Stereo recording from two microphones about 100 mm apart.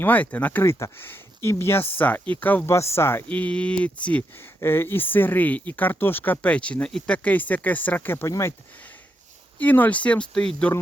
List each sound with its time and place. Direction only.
0.0 s speech: 15° left (ahead or behind)
0.6 s speech: 25° left (ahead or behind)
2.7 s speech: 25° left (ahead or behind)
9.6 s speech: 15° left (ahead or behind)